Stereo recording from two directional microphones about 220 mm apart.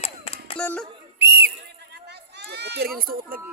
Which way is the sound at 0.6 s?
5° left (ahead or behind).